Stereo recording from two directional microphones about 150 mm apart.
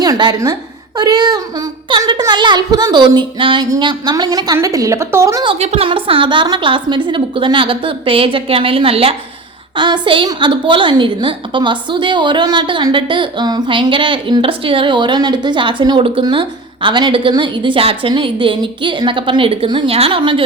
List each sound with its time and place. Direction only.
0.0 s a child's voice: 25° right (ahead or behind)
5.5 s a woman's voice: 45° right (ahead or behind)